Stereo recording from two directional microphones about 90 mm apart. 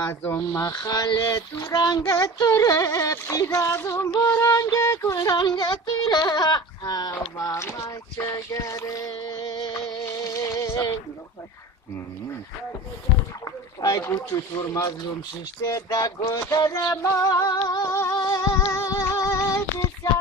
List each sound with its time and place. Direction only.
0.1 s speech: 25° left (ahead or behind)
0.4 s child singing: 35° left (ahead or behind)
2.6 s music: 40° left (ahead or behind)
4.1 s child singing: 45° left (ahead or behind)
4.4 s music: 40° left (ahead or behind)
5.3 s speech: 55° left (ahead or behind)
10.0 s music: 35° left (ahead or behind)
13.7 s speech: 45° left (ahead or behind)
14.3 s music: 40° left (ahead or behind)
17.8 s music: 35° left (ahead or behind)